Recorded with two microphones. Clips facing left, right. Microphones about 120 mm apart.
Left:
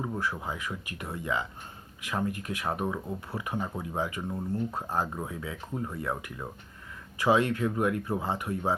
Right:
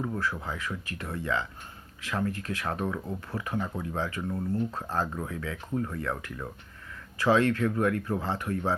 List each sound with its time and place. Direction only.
0.0 s speech: 15° left (ahead or behind)